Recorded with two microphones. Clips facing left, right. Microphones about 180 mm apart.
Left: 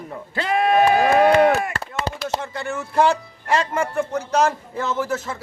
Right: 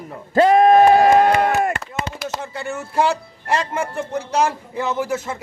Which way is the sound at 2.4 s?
5° right (ahead or behind).